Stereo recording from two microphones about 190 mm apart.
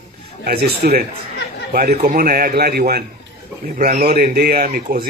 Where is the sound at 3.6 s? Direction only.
45° right (ahead or behind).